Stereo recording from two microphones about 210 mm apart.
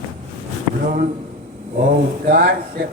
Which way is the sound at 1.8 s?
40° right (ahead or behind).